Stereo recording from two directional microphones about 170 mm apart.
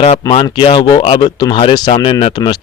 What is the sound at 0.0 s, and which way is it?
Speech, 30° left (ahead or behind).